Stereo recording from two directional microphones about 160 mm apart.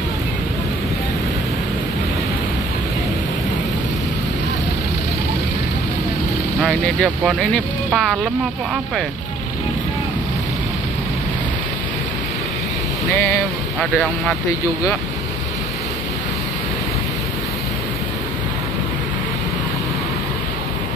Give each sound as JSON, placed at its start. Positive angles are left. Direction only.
{"t": 6.6, "sound": "speech", "side_deg": 5}
{"t": 13.1, "sound": "speech", "side_deg": 15}
{"t": 13.7, "sound": "speech", "side_deg": 0}